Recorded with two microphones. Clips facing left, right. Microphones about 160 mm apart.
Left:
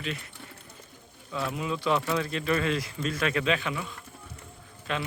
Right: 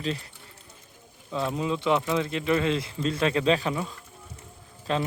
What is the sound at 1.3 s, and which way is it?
Speech, 25° right (ahead or behind).